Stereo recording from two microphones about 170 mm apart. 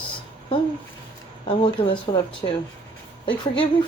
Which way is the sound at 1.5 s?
30° left (ahead or behind).